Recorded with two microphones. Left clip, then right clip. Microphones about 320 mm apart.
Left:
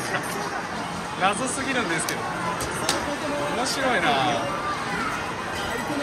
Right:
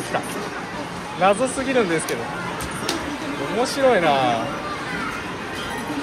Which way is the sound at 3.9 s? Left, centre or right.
Centre.